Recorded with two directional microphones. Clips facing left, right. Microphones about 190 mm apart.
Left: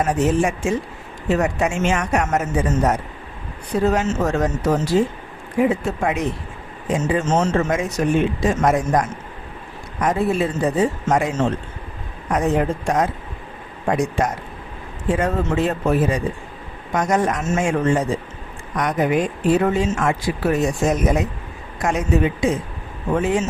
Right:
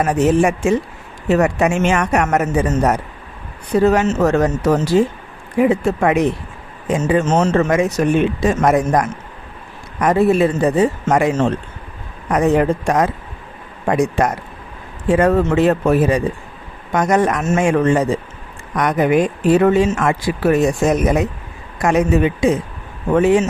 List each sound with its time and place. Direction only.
0.0 s speech: 65° right (ahead or behind)